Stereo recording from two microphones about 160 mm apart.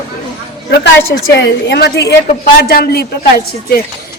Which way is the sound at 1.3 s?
90° left.